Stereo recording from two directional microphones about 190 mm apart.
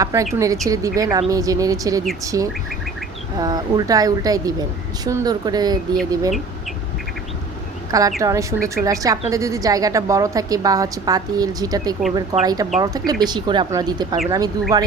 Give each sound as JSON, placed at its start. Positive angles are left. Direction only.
{"t": 0.0, "sound": "a woman's voice", "side_deg": -15}
{"t": 7.9, "sound": "a woman's voice", "side_deg": -20}